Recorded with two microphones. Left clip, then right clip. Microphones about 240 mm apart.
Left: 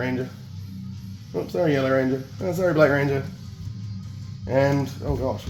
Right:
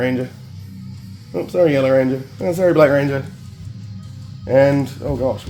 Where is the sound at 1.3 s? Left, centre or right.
Right.